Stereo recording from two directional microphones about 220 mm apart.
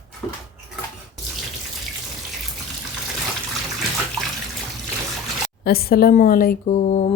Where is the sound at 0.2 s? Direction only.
10° left (ahead or behind).